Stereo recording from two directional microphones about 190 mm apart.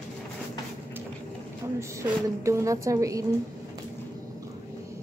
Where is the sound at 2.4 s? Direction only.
15° right (ahead or behind).